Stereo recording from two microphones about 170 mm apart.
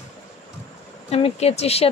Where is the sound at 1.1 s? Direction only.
35° left (ahead or behind).